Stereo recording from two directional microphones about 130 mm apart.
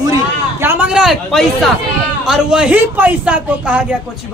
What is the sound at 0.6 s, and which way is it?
Speech, 15° right (ahead or behind).